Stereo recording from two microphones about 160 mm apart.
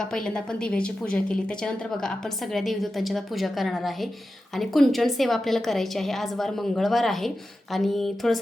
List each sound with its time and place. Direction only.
0.0 s a woman's voice: 5° left (ahead or behind)